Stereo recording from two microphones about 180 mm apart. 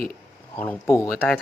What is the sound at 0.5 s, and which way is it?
Speech, 10° left (ahead or behind).